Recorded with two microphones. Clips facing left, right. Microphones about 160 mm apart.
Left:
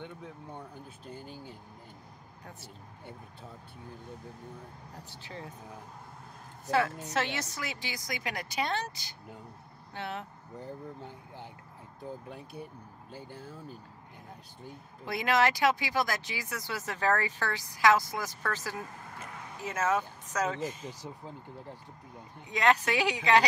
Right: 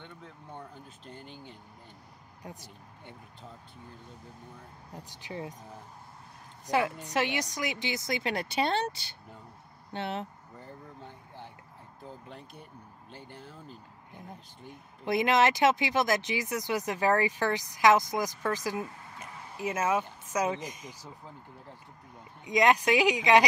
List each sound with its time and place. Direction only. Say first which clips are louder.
0.0 s a sound: left 5 dB; 15° left (ahead or behind)
1.0 s speech: left 2 dB; 10° left (ahead or behind)
5.1 s speech: right 6 dB; 15° right (ahead or behind)
6.6 s a woman's voice: even; 15° right (ahead or behind)
9.9 s speech: right 4 dB; 25° right (ahead or behind)
12.3 s speech: left 4 dB; 10° left (ahead or behind)
15.0 s speech: right 3 dB; 20° right (ahead or behind)
22.5 s speech: right 3 dB; 15° right (ahead or behind)